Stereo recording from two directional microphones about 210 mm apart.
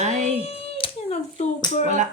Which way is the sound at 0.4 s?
25° left (ahead or behind).